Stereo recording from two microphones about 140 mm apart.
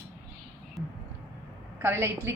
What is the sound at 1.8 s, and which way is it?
Speech, 15° right (ahead or behind).